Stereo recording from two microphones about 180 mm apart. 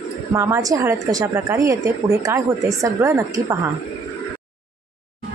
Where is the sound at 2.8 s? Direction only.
15° right (ahead or behind).